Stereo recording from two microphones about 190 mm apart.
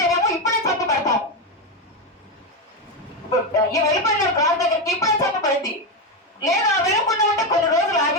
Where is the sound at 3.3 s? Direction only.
20° left (ahead or behind).